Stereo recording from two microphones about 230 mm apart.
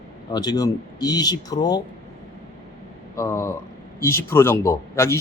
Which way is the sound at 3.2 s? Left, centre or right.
Centre.